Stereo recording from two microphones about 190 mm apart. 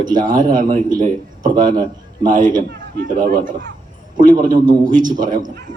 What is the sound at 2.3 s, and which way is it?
A man's voice, 45° right (ahead or behind).